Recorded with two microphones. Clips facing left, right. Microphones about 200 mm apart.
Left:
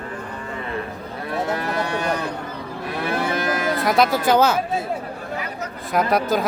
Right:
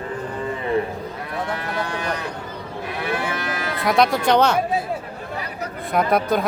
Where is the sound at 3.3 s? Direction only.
45° left (ahead or behind).